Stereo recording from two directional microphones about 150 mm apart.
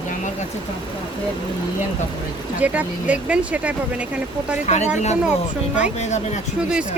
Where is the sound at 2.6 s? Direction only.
10° right (ahead or behind).